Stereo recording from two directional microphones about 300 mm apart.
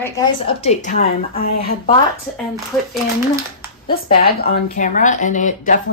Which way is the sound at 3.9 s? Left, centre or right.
Left.